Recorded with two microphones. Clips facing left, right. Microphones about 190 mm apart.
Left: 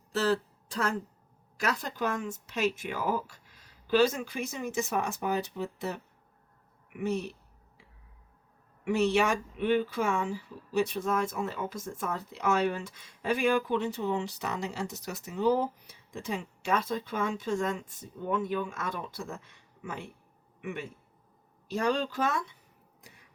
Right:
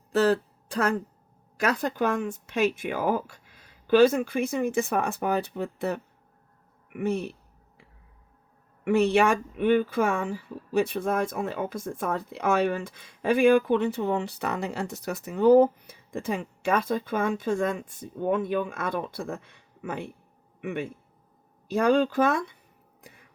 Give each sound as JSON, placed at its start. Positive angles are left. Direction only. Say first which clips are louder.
{"t": 0.1, "sound": "a sound", "louder": "right 6 dB", "side_deg": -55}
{"t": 1.6, "sound": "speech", "louder": "right 6 dB", "side_deg": -55}
{"t": 8.8, "sound": "a man's voice", "louder": "right 5 dB", "side_deg": -55}